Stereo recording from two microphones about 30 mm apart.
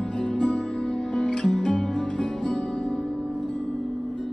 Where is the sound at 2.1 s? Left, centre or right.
Left.